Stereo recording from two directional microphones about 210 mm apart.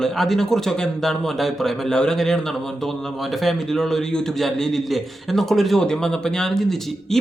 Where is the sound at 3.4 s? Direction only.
Centre (ahead or behind).